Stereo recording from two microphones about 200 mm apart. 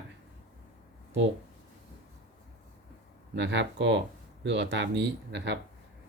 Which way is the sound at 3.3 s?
60° right (ahead or behind).